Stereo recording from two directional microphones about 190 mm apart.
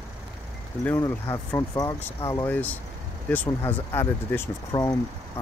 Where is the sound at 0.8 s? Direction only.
15° left (ahead or behind).